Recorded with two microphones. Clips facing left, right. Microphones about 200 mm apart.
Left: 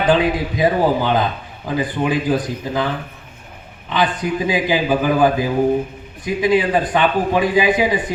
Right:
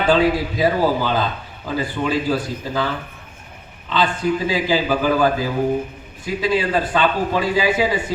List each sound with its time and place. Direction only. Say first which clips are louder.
0.0 s speech: even; 15° left (ahead or behind)
3.9 s speech: even; 15° left (ahead or behind)